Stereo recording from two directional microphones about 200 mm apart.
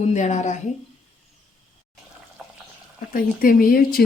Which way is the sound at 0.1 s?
35° left (ahead or behind).